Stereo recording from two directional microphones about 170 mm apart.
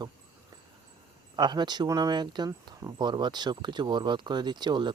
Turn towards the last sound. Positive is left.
turn(degrees=-25)  # may be behind; listen again after turning